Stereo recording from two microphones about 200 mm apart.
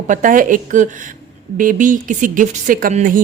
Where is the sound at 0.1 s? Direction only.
40° right (ahead or behind).